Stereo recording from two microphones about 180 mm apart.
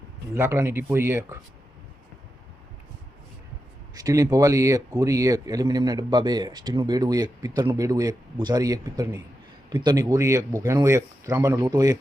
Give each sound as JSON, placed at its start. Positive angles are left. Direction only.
{"t": 0.3, "sound": "speech", "side_deg": -15}
{"t": 3.9, "sound": "speech", "side_deg": -20}